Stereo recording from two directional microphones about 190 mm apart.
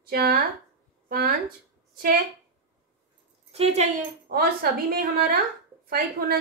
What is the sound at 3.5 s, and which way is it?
A woman's voice, 35° right (ahead or behind).